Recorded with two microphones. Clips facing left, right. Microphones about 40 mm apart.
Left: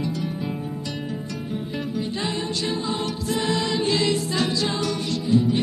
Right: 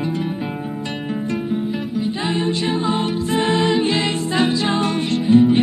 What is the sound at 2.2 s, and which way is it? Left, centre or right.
Music, right.